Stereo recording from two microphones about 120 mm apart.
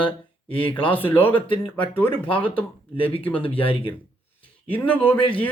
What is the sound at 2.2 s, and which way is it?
Speech, 45° left (ahead or behind).